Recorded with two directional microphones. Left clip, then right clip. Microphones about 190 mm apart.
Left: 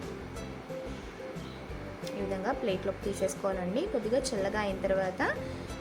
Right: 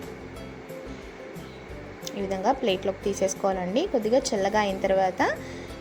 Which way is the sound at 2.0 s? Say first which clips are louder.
Right 8 dB; 20° right (ahead or behind).